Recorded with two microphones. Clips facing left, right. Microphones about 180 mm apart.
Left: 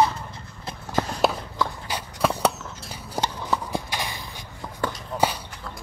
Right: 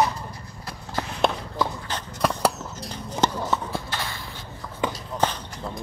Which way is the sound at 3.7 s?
15° left (ahead or behind).